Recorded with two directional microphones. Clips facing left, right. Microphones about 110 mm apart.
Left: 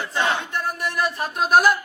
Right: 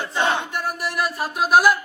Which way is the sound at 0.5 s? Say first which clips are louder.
Even; 5° right (ahead or behind).